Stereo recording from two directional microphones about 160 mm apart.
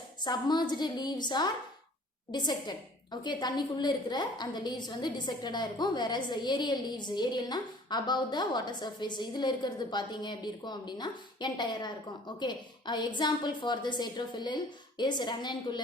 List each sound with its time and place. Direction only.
0.3 s a woman's voice: 25° left (ahead or behind)